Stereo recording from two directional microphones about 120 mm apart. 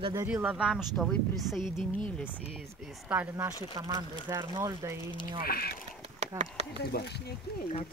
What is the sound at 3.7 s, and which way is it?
Speech, 30° right (ahead or behind).